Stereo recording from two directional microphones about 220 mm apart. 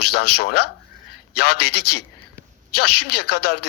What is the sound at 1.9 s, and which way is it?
Speech, 45° left (ahead or behind).